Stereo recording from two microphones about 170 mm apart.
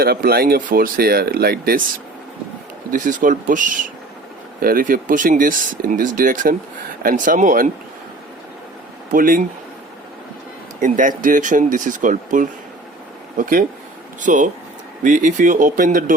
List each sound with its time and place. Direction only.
0.0 s speech: 60° right (ahead or behind)
2.9 s speech: 50° right (ahead or behind)
9.1 s speech: 55° right (ahead or behind)
10.8 s speech: 50° right (ahead or behind)